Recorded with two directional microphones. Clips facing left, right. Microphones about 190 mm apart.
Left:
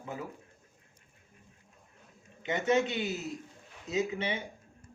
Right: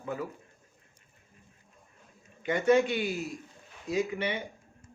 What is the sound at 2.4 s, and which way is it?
Speech, 25° left (ahead or behind).